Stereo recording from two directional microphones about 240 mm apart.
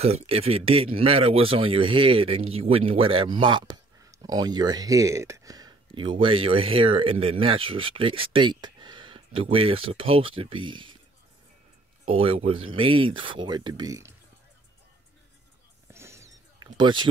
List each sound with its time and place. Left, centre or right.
0.0 s speech: right
12.0 s speech: right
15.9 s a sound: centre